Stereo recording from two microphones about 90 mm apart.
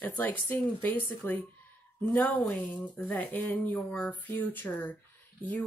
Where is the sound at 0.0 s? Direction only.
20° left (ahead or behind).